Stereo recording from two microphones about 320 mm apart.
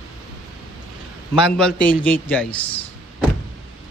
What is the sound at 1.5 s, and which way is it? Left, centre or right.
A man's voice, centre.